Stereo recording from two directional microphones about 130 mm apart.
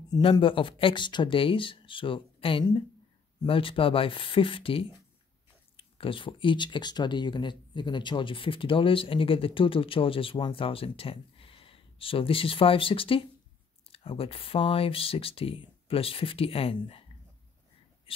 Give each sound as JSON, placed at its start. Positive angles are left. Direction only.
{"t": 0.2, "sound": "speech", "side_deg": 40}